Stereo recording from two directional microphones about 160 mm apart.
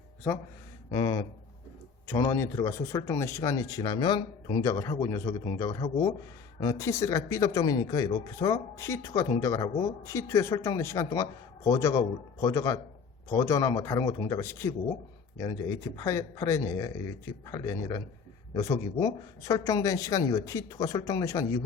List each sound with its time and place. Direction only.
0.9 s speech: 25° left (ahead or behind)
4.6 s speech: 20° left (ahead or behind)
16.0 s speech: 20° left (ahead or behind)